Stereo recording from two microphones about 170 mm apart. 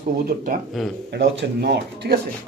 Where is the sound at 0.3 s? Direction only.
55° right (ahead or behind).